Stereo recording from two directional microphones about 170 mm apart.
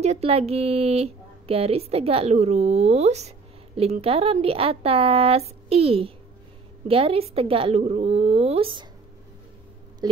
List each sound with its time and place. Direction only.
0.0 s a woman's voice: 40° right (ahead or behind)